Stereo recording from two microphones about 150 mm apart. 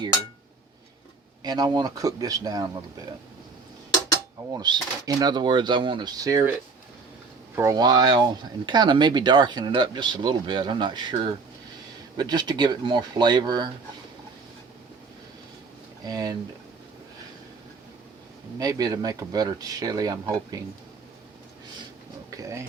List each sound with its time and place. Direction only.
1.5 s speech: 25° right (ahead or behind)
4.5 s speech: 25° right (ahead or behind)
7.5 s speech: 20° right (ahead or behind)
16.0 s speech: 25° right (ahead or behind)
18.6 s speech: 25° right (ahead or behind)
22.3 s speech: 20° right (ahead or behind)